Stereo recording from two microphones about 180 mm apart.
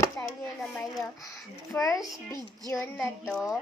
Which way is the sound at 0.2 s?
10° left (ahead or behind).